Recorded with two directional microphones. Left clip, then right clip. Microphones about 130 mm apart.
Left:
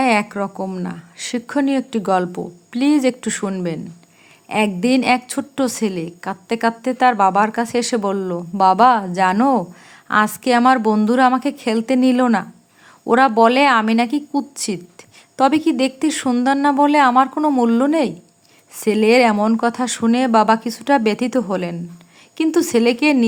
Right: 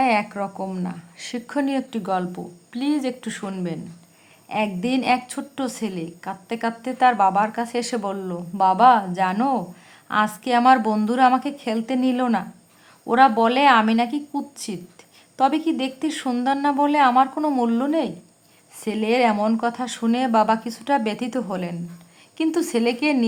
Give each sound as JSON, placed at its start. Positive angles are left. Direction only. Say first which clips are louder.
{"t": 0.0, "sound": "a woman's voice", "louder": "left 3 dB", "side_deg": 35}